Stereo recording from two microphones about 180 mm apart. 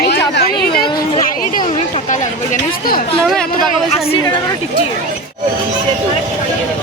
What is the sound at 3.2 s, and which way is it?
Speech, 5° left (ahead or behind).